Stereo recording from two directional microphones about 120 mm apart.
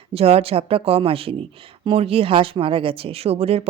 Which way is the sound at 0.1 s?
55° right (ahead or behind).